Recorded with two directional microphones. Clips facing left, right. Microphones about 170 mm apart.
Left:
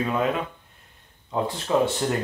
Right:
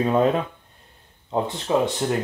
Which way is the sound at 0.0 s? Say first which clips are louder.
Right 5 dB; 35° right (ahead or behind).